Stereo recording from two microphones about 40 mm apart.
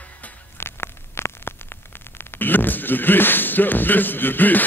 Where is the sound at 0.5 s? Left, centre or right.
Left.